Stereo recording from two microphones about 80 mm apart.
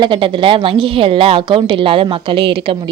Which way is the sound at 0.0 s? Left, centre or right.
Right.